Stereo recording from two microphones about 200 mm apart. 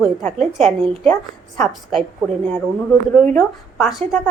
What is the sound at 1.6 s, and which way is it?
Speech, centre (ahead or behind).